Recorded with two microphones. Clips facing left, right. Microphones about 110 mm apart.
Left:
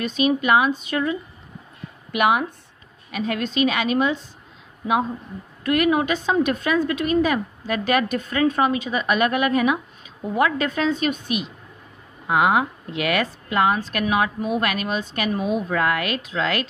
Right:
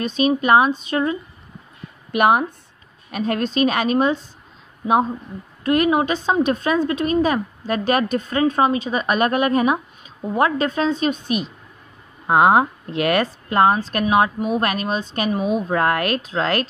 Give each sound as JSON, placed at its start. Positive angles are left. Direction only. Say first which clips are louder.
{"t": 0.0, "sound": "a woman's voice", "louder": "right 2 dB", "side_deg": -30}
{"t": 2.1, "sound": "a woman's voice", "louder": "right 3 dB", "side_deg": -40}
{"t": 5.6, "sound": "a woman's voice", "louder": "right 2 dB", "side_deg": -30}